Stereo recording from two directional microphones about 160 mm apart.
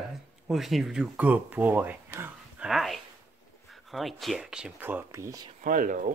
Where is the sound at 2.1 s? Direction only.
10° right (ahead or behind).